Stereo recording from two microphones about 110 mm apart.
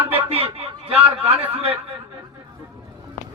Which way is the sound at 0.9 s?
60° right (ahead or behind).